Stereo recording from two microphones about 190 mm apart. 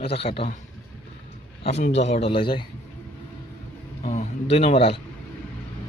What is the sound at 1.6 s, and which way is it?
A man's voice, 35° left (ahead or behind).